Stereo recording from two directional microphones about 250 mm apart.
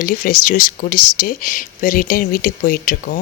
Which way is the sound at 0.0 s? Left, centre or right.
Left.